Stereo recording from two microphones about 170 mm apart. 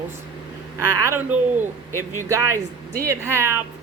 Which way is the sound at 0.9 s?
15° right (ahead or behind).